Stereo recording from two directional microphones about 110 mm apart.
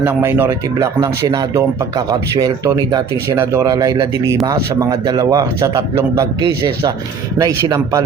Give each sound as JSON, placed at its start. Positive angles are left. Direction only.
{"t": 0.0, "sound": "a man's voice", "side_deg": -20}